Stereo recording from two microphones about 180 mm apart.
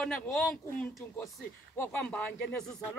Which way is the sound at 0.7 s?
10° left (ahead or behind).